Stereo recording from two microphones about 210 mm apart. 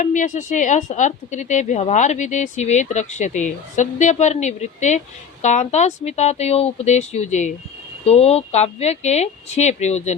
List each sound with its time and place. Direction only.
0.0 s speech: 40° left (ahead or behind)